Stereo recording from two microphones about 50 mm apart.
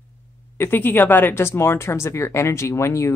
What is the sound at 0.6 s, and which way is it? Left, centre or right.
Speech, left.